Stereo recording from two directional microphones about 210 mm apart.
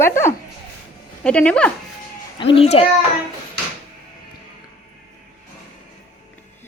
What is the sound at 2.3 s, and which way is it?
Speech, 25° left (ahead or behind).